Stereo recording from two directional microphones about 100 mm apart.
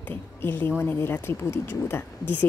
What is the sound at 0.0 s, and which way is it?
A woman's voice, 20° left (ahead or behind).